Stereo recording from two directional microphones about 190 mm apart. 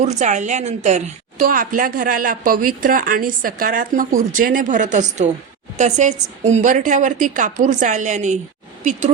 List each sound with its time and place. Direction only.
0.0 s a woman's voice: 40° right (ahead or behind)